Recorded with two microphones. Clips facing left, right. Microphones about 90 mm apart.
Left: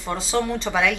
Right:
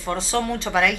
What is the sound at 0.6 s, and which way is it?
Speech, centre (ahead or behind).